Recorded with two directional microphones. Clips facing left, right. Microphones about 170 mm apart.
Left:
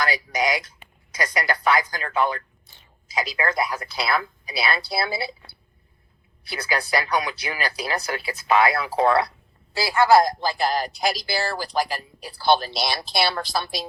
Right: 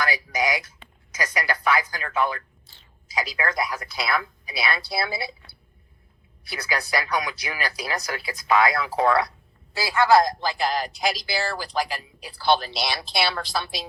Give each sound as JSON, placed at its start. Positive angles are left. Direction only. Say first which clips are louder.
{"t": 0.0, "sound": "a woman's voice", "louder": "left 1 dB", "side_deg": 35}
{"t": 2.6, "sound": "a woman's voice", "louder": "left 1 dB", "side_deg": 20}